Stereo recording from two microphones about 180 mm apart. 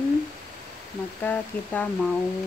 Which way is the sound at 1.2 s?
10° left (ahead or behind).